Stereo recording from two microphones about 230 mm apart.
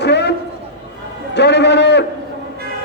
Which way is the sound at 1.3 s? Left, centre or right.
Left.